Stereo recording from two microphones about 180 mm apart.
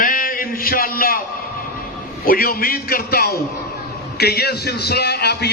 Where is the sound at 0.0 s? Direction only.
50° left (ahead or behind).